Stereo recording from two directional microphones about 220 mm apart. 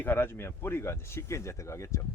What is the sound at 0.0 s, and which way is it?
Speech, 10° left (ahead or behind).